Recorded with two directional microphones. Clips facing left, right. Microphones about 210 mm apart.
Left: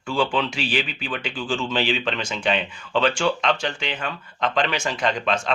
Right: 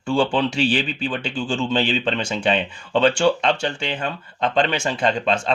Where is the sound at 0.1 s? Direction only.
30° right (ahead or behind).